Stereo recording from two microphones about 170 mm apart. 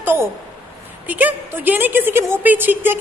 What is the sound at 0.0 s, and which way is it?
A woman's voice, 10° right (ahead or behind).